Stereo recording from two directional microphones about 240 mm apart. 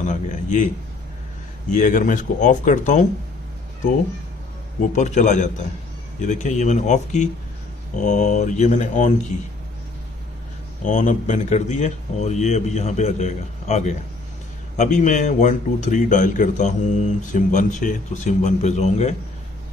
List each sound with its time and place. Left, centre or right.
0.0 s speech: left
1.7 s speech: left
4.9 s a man's voice: left
10.9 s a man's voice: left